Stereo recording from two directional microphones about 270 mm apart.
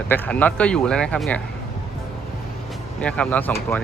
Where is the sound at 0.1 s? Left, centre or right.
Centre.